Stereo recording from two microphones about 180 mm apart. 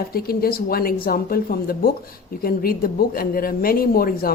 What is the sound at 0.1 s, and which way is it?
A woman's voice, 55° left (ahead or behind).